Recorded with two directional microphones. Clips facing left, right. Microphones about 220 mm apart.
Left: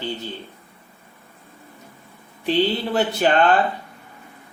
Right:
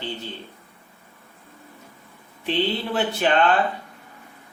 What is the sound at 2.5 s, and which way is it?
Speech, 40° left (ahead or behind).